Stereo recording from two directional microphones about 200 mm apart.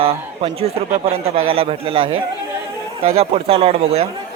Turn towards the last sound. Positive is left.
turn(degrees=-30)  # may be behind; listen again after turning